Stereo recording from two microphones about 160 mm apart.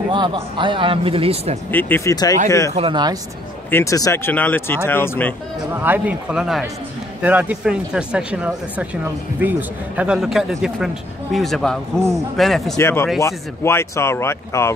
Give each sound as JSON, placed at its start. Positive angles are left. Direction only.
{"t": 0.1, "sound": "a man's voice", "side_deg": -30}
{"t": 1.7, "sound": "speech", "side_deg": 10}
{"t": 2.7, "sound": "speech", "side_deg": -35}
{"t": 3.7, "sound": "speech", "side_deg": 20}
{"t": 5.8, "sound": "speech", "side_deg": -10}
{"t": 12.7, "sound": "speech", "side_deg": 15}